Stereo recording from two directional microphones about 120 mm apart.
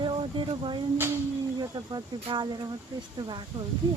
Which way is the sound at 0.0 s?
45° right (ahead or behind).